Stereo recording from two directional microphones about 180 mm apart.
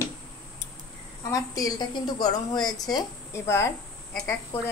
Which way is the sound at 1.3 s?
20° left (ahead or behind).